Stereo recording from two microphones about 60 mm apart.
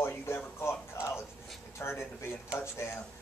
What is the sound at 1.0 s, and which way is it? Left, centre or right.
Speech, left.